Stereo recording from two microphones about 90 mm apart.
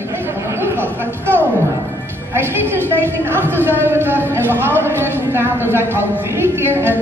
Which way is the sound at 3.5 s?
25° right (ahead or behind).